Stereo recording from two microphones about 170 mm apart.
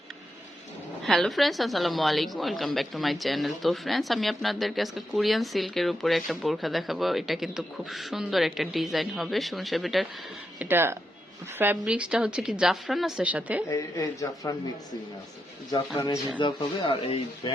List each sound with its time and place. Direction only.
1.0 s speech: centre (ahead or behind)
10.6 s speech: 15° right (ahead or behind)
13.7 s a man's voice: 20° left (ahead or behind)
16.4 s speech: 30° left (ahead or behind)